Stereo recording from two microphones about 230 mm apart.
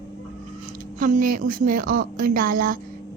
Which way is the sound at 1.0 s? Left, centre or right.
Right.